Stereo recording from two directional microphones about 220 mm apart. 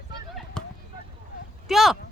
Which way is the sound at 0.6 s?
5° left (ahead or behind).